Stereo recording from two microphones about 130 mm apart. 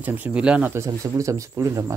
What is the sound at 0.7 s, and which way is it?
Speech, 25° right (ahead or behind).